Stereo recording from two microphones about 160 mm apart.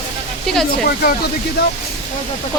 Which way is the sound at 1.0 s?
75° left (ahead or behind).